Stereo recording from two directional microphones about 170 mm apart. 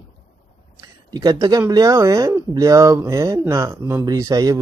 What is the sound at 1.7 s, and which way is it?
Speech, 20° right (ahead or behind).